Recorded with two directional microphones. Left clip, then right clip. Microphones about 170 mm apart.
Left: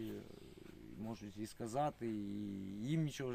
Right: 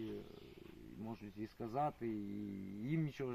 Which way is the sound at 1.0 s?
25° left (ahead or behind).